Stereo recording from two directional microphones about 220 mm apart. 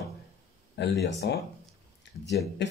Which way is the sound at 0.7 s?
50° left (ahead or behind).